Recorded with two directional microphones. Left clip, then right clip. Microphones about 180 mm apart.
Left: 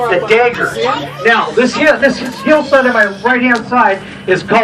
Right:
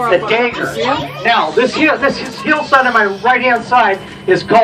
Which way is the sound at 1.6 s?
35° right (ahead or behind).